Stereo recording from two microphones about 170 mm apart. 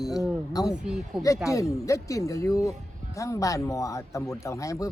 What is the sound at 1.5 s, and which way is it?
Speech, 20° left (ahead or behind).